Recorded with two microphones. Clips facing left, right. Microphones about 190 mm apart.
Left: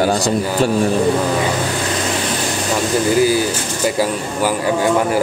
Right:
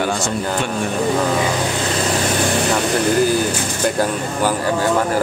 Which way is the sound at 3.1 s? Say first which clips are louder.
Left 2 dB; 5° left (ahead or behind).